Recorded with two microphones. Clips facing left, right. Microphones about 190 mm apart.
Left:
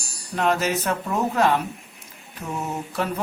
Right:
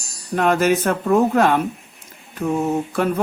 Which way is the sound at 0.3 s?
55° right (ahead or behind).